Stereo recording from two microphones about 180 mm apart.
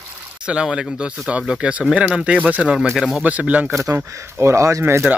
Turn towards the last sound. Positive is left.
turn(degrees=-15)  # may be behind; listen again after turning